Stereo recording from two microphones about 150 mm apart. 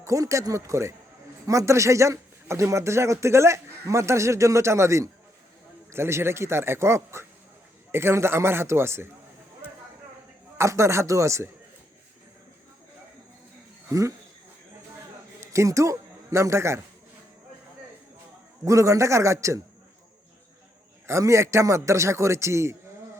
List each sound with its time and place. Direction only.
0.0 s a man's voice: 20° right (ahead or behind)
10.6 s a man's voice: 20° right (ahead or behind)
15.4 s a man's voice: 20° right (ahead or behind)
18.6 s a man's voice: 20° right (ahead or behind)
21.1 s a man's voice: 20° right (ahead or behind)